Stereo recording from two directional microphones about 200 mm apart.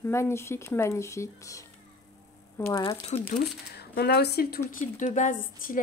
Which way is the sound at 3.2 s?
55° left (ahead or behind).